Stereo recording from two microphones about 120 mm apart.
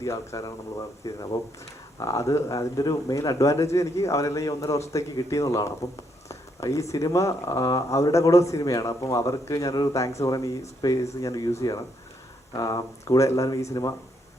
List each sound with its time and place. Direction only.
0.0 s speech: 25° left (ahead or behind)
12.5 s speech: 30° left (ahead or behind)